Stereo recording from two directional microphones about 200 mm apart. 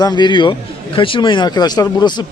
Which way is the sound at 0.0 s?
20° left (ahead or behind).